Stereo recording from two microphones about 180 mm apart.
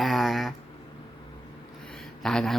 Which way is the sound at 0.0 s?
Centre (ahead or behind).